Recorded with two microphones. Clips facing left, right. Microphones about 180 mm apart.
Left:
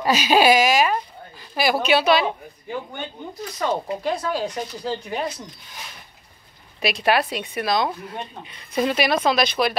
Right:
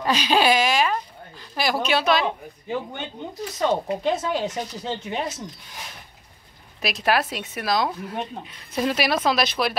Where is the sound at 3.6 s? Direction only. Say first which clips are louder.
Right 2 dB; 20° right (ahead or behind).